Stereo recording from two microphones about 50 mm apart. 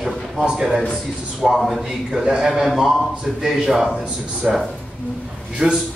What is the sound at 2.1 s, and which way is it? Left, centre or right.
Speech, centre.